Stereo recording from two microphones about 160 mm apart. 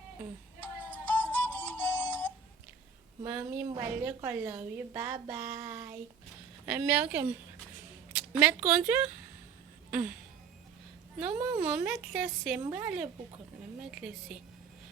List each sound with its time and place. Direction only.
0.6 s music: 10° left (ahead or behind)
3.2 s a woman's voice: 15° right (ahead or behind)
11.6 s a woman's voice: 10° right (ahead or behind)